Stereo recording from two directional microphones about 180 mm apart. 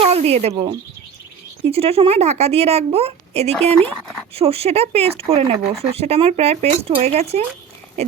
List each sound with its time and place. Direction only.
0.0 s a woman's voice: 35° right (ahead or behind)
3.8 s speech: 5° left (ahead or behind)
4.4 s a woman's voice: 35° right (ahead or behind)